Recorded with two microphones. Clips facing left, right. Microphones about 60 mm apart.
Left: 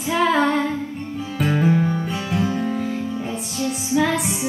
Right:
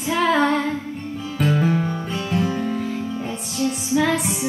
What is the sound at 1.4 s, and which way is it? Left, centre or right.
Music, centre.